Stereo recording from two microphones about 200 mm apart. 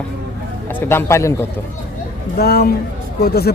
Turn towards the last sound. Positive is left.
turn(degrees=50)  # may be behind; listen again after turning